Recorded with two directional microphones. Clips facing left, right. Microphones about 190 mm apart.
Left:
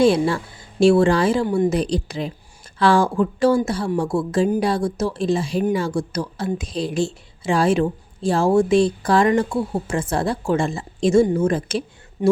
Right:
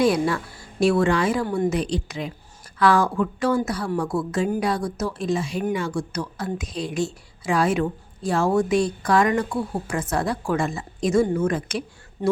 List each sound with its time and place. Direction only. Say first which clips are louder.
0.0 s speech: left 4 dB; 30° left (ahead or behind)
12.2 s speech: left 5 dB; 15° left (ahead or behind)